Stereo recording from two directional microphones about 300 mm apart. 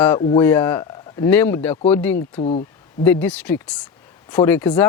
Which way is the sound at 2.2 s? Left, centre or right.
Left.